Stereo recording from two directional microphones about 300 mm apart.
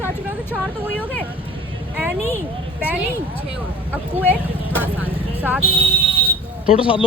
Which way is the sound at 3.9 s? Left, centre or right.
Centre.